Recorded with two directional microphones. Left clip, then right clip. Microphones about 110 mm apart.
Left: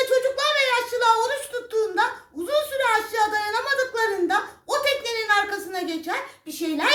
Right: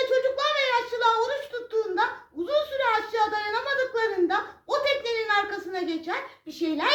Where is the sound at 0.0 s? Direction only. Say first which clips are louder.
Left 3 dB; 25° left (ahead or behind).